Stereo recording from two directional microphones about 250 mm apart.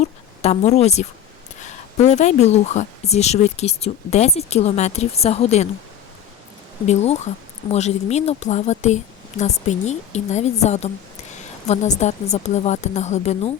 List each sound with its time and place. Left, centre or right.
0.0 s a woman's voice: left
6.8 s speech: left